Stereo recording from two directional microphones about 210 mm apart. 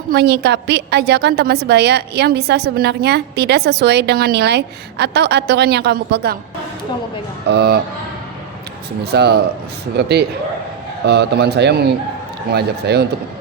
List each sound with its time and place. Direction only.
0.1 s a woman's voice: 50° right (ahead or behind)
7.4 s a woman's voice: 50° right (ahead or behind)
9.0 s a woman's voice: 50° right (ahead or behind)